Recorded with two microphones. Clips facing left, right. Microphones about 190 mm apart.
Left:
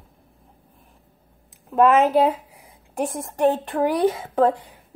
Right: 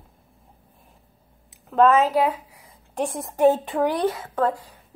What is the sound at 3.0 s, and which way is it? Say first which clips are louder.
A woman's voice: right 1 dB; centre (ahead or behind).